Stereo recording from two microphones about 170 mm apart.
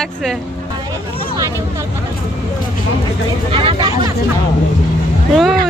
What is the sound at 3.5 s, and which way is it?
Speech, 30° right (ahead or behind).